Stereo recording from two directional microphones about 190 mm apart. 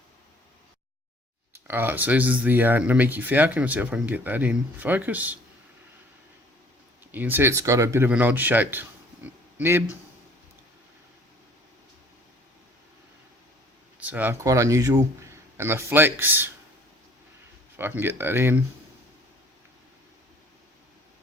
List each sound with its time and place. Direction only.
1.5 s speech: 10° right (ahead or behind)
7.1 s speech: 10° right (ahead or behind)
14.0 s speech: 10° right (ahead or behind)
17.7 s speech: 10° right (ahead or behind)